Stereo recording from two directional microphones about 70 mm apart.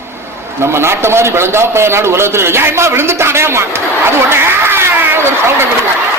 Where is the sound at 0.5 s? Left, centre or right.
Right.